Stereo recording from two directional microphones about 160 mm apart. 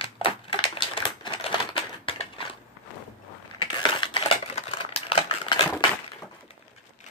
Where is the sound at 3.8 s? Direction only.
30° left (ahead or behind).